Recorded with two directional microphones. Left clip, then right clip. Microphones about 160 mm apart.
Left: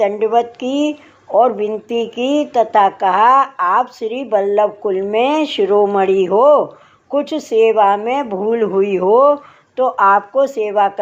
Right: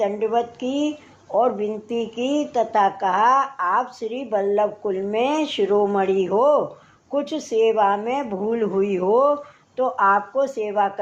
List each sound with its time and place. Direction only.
0.0 s speech: 35° left (ahead or behind)